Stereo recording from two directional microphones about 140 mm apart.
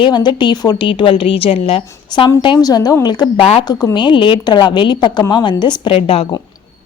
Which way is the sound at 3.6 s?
30° left (ahead or behind).